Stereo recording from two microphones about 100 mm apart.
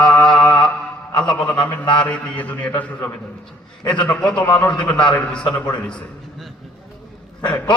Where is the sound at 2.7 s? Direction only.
25° left (ahead or behind).